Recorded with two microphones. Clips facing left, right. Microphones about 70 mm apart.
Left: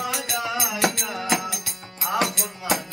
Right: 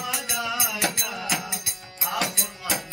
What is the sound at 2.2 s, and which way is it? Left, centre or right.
Music, left.